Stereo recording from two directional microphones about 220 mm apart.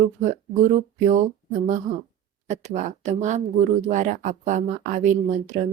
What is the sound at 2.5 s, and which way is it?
Speech, 30° right (ahead or behind).